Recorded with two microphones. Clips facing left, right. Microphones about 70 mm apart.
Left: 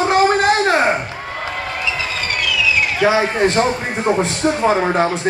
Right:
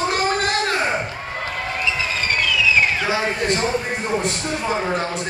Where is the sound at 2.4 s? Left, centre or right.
Right.